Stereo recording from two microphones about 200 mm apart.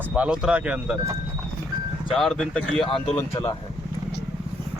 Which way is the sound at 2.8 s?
30° left (ahead or behind).